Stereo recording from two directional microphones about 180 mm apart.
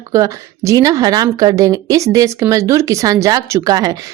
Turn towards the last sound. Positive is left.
turn(degrees=-20)  # may be behind; listen again after turning